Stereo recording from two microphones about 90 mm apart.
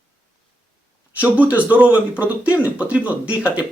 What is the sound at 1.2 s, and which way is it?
Speech, 15° right (ahead or behind).